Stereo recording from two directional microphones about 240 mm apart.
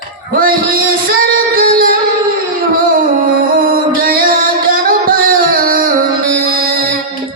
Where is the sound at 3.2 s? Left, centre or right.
Right.